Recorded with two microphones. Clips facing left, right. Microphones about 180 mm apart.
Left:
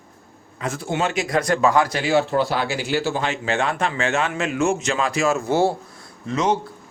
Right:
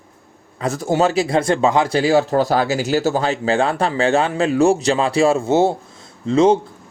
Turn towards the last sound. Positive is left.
turn(degrees=-30)  # may be behind; listen again after turning